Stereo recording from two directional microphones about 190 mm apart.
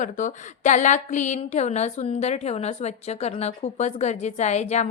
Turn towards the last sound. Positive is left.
turn(degrees=35)  # may be behind; listen again after turning